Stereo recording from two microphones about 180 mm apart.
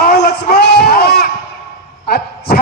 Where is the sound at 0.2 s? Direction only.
65° left (ahead or behind).